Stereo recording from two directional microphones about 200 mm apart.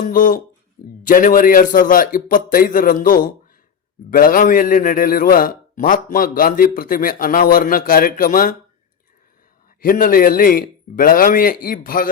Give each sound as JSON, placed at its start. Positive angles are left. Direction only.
{"t": 0.0, "sound": "a man's voice", "side_deg": 40}
{"t": 9.8, "sound": "a man's voice", "side_deg": 45}